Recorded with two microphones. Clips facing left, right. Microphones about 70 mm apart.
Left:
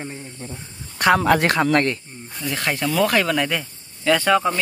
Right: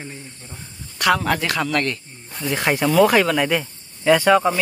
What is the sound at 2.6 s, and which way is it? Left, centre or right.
Speech, centre.